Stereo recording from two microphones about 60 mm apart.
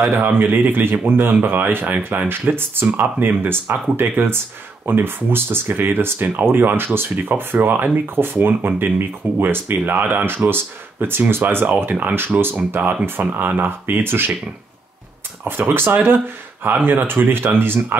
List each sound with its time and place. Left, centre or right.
0.2 s speech: right
15.4 s speech: right